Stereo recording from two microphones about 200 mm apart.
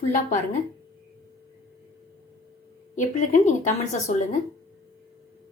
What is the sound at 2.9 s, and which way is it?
A woman's voice, 40° left (ahead or behind).